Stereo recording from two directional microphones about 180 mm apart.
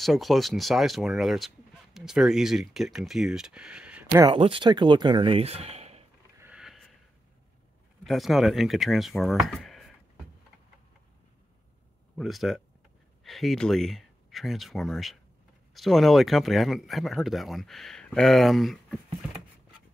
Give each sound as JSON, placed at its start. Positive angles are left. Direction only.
{"t": 0.0, "sound": "speech", "side_deg": 0}
{"t": 4.2, "sound": "speech", "side_deg": -30}
{"t": 6.4, "sound": "sniff", "side_deg": -5}
{"t": 8.0, "sound": "speech", "side_deg": 0}
{"t": 12.2, "sound": "speech", "side_deg": 0}